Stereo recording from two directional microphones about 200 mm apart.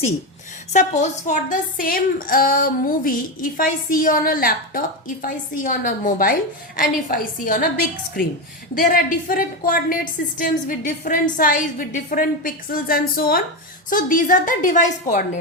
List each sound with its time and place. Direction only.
0.7 s a woman's voice: 35° left (ahead or behind)
8.7 s a woman's voice: 45° left (ahead or behind)